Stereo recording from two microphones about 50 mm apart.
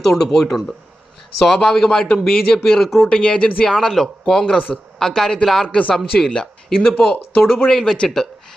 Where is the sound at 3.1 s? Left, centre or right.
Left.